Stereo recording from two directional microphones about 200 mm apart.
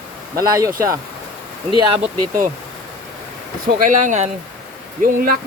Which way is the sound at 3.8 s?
40° right (ahead or behind).